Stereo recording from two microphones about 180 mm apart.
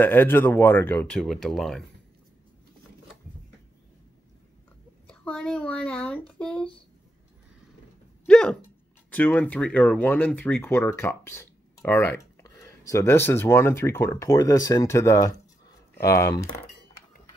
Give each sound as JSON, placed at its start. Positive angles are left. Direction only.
{"t": 0.0, "sound": "speech", "side_deg": 10}
{"t": 5.0, "sound": "speech", "side_deg": 5}
{"t": 8.3, "sound": "speech", "side_deg": 5}